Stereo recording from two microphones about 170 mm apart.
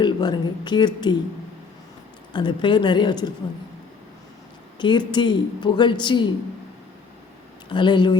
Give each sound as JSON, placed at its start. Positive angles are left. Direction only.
{"t": 0.0, "sound": "a woman's voice", "side_deg": 25}
{"t": 2.3, "sound": "a woman's voice", "side_deg": 30}
{"t": 4.8, "sound": "a woman's voice", "side_deg": 25}
{"t": 7.7, "sound": "a woman's voice", "side_deg": 25}